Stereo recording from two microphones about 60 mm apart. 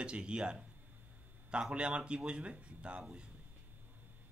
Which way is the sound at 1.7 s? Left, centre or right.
Centre.